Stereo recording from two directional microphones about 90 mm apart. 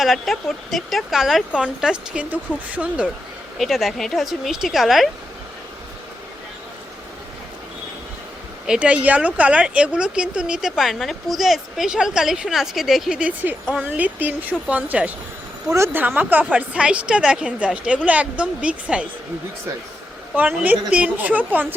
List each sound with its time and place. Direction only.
0.0 s speech: centre (ahead or behind); by 3.1 s 15° right (ahead or behind)
3.6 s speech: centre (ahead or behind)
8.6 s speech: 10° right (ahead or behind)
15.7 s speech: 30° right (ahead or behind)
16.0 s speech: 20° right (ahead or behind)
20.3 s speech: 20° right (ahead or behind)